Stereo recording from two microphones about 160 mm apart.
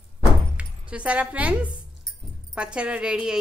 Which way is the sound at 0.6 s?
5° right (ahead or behind).